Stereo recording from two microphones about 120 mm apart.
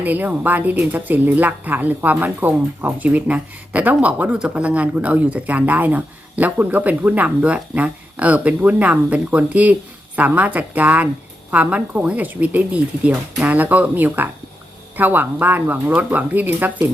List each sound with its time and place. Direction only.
0.0 s speech: 15° right (ahead or behind)